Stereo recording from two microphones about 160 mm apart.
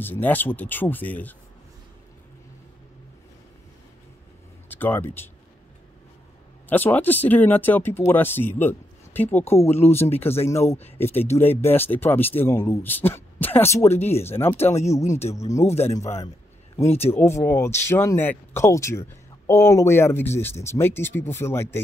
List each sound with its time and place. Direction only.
0.0 s speech: 10° left (ahead or behind)
4.6 s speech: 10° left (ahead or behind)
6.7 s speech: 10° left (ahead or behind)
15.6 s speech: 40° left (ahead or behind)
17.1 s speech: 15° left (ahead or behind)